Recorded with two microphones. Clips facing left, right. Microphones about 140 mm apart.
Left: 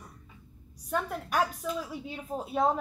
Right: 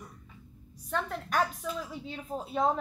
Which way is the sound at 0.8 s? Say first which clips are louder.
Left 1 dB; 10° left (ahead or behind).